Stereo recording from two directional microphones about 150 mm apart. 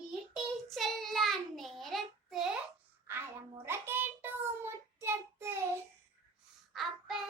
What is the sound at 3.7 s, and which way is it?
Child singing, 15° right (ahead or behind).